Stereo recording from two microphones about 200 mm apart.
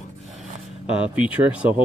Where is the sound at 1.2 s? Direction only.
5° right (ahead or behind).